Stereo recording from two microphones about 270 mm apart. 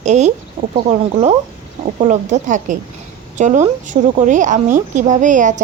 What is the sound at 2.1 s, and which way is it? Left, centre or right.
A woman's voice, right.